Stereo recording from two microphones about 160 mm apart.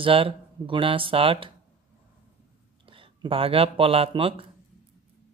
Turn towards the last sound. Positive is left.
turn(degrees=-35)  # may be behind; listen again after turning